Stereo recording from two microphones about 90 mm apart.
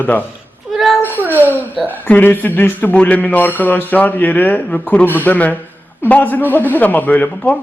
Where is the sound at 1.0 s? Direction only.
20° right (ahead or behind).